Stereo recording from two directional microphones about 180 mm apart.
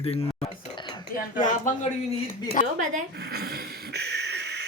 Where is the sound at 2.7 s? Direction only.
45° right (ahead or behind).